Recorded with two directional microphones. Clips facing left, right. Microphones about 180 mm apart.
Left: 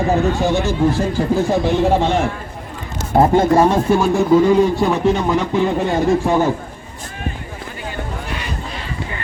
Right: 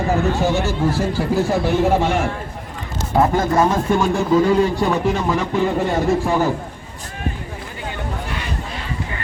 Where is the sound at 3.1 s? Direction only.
30° left (ahead or behind).